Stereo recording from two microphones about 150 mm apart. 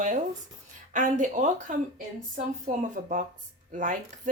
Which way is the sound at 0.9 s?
55° right (ahead or behind).